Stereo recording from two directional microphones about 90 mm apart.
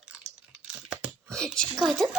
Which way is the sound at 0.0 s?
10° right (ahead or behind).